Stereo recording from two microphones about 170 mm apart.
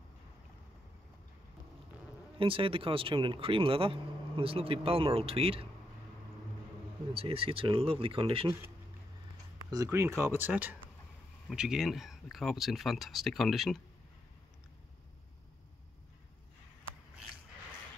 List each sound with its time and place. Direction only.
2.3 s speech: 30° right (ahead or behind)
7.2 s speech: 35° right (ahead or behind)
9.7 s speech: 20° right (ahead or behind); by 13.7 s centre (ahead or behind)